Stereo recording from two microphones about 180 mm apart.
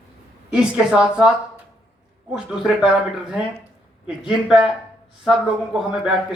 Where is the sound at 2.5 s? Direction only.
5° right (ahead or behind).